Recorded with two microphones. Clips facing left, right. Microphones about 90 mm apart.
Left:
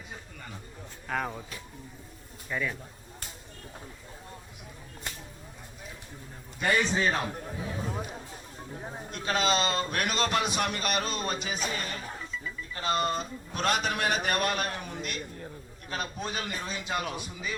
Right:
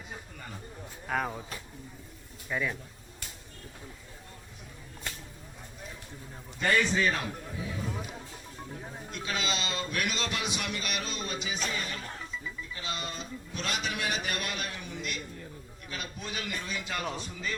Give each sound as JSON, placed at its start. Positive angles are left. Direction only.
{"t": 1.0, "sound": "speech", "side_deg": -5}
{"t": 2.5, "sound": "speech", "side_deg": -5}
{"t": 6.6, "sound": "a man's voice", "side_deg": 15}
{"t": 9.1, "sound": "a man's voice", "side_deg": 45}